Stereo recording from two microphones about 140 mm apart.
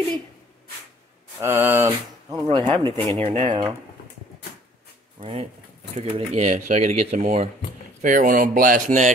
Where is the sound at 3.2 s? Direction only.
50° right (ahead or behind).